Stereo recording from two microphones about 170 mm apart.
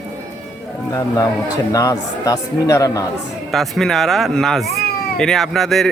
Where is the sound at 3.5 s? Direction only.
Centre (ahead or behind).